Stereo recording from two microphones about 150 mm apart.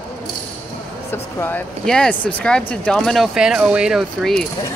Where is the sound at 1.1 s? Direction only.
15° left (ahead or behind).